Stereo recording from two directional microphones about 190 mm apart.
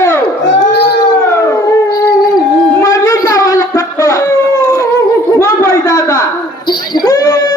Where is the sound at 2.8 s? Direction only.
20° left (ahead or behind).